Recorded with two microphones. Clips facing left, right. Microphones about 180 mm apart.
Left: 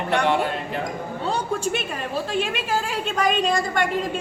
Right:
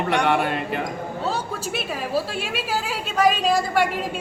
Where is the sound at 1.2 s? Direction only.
5° right (ahead or behind).